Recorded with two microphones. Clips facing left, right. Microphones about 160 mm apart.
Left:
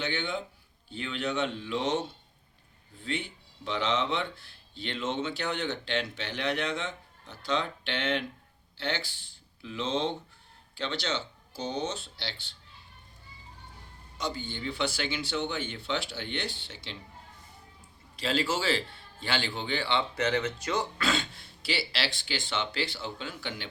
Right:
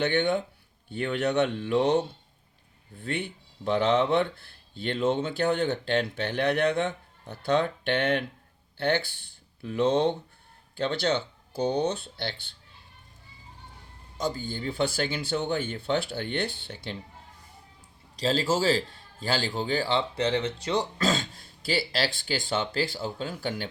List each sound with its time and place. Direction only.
0.0 s speech: 60° right (ahead or behind)
3.0 s speech: 60° right (ahead or behind)
14.2 s speech: 45° right (ahead or behind)
18.2 s speech: 35° right (ahead or behind)